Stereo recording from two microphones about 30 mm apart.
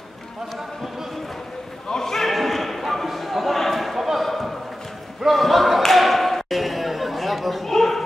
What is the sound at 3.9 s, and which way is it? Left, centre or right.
Basketball bounce, centre.